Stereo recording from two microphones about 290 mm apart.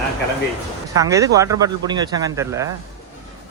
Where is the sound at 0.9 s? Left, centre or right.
Centre.